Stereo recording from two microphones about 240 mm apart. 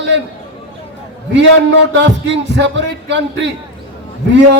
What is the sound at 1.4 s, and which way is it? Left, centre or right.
Speech, right.